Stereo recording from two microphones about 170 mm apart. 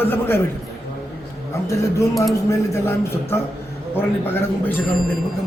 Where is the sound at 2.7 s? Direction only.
15° left (ahead or behind).